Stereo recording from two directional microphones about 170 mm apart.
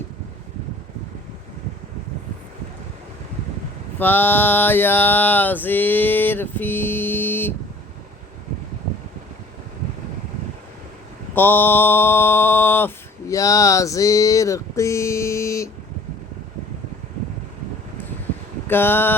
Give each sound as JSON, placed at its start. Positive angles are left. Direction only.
{"t": 3.9, "sound": "mantra", "side_deg": 10}
{"t": 11.3, "sound": "mantra", "side_deg": 10}
{"t": 18.7, "sound": "mantra", "side_deg": 10}